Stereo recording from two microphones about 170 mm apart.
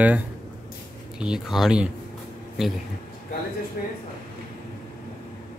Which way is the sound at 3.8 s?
60° left (ahead or behind).